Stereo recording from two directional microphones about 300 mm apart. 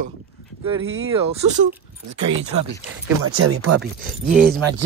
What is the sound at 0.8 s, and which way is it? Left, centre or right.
Speech, right.